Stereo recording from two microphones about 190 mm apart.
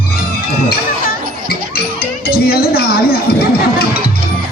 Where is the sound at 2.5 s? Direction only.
55° left (ahead or behind).